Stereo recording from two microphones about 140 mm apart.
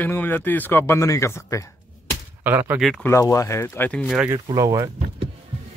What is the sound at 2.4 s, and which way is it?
Speech, 15° right (ahead or behind).